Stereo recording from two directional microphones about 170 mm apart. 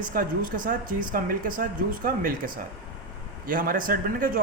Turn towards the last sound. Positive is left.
turn(degrees=-55)  # may be behind; listen again after turning